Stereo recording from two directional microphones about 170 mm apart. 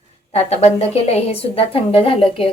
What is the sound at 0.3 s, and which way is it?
A woman's voice, 40° left (ahead or behind).